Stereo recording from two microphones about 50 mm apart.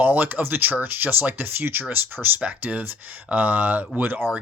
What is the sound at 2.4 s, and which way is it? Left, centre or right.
Speech, right.